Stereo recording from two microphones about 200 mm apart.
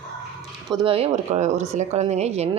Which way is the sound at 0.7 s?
25° right (ahead or behind).